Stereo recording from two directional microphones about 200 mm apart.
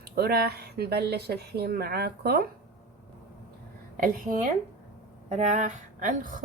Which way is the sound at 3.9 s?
45° right (ahead or behind).